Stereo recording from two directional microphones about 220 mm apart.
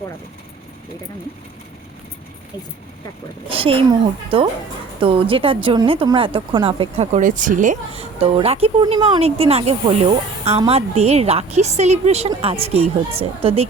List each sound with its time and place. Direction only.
3.5 s speech: 25° right (ahead or behind)